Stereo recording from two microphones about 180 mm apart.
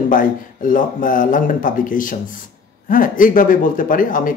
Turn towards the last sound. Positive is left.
turn(degrees=50)  # may be behind; listen again after turning